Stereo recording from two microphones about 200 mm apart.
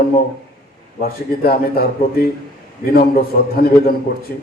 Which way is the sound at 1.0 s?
50° left (ahead or behind).